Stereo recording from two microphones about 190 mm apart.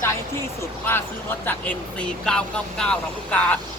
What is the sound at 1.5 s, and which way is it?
Speech, 5° left (ahead or behind).